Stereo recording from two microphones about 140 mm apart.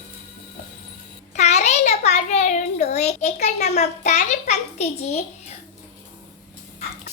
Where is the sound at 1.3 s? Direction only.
55° left (ahead or behind).